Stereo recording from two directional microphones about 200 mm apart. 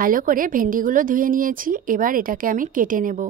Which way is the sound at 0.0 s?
45° right (ahead or behind).